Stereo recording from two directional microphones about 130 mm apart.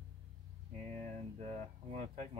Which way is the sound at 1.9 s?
65° right (ahead or behind).